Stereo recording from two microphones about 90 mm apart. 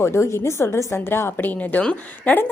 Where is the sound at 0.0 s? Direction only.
30° left (ahead or behind).